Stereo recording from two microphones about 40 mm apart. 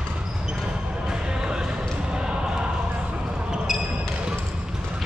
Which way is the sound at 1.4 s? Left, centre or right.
Centre.